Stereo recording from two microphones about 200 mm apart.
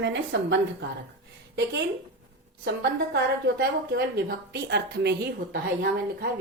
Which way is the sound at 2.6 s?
55° right (ahead or behind).